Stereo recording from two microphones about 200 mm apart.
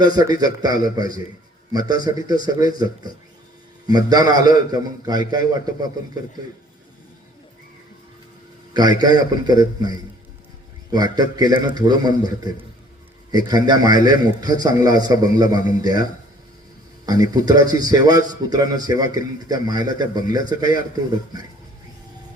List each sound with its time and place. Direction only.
0.1 s a man's voice: 20° right (ahead or behind)
8.7 s a man's voice: 20° right (ahead or behind)
17.1 s a man's voice: 20° right (ahead or behind)